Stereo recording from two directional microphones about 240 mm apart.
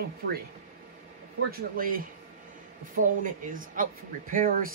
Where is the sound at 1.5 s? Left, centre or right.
Right.